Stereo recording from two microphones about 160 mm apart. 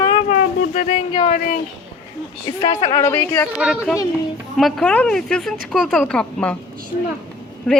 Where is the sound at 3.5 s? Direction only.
5° right (ahead or behind).